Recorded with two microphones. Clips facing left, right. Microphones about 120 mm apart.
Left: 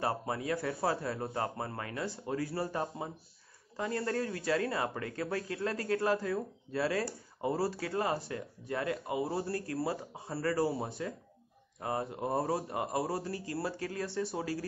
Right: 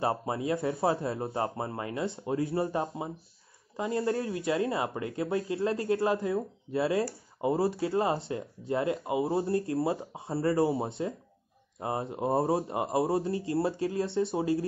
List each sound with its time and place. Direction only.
0.0 s speech: 20° right (ahead or behind)